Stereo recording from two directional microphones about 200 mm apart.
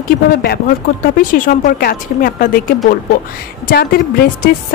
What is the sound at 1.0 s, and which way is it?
Speech, 45° left (ahead or behind).